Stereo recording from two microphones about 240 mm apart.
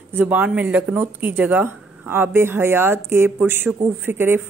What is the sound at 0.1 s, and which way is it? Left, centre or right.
Speech, centre.